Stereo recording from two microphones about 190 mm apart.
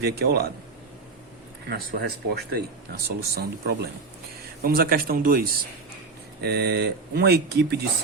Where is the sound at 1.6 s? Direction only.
60° right (ahead or behind).